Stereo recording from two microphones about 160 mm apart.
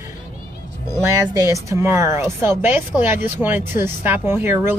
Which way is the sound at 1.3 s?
20° right (ahead or behind).